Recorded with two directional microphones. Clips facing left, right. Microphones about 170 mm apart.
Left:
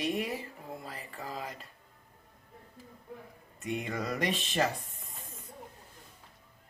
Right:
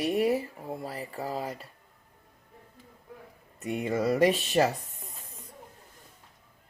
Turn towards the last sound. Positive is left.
turn(degrees=-40)  # may be behind; listen again after turning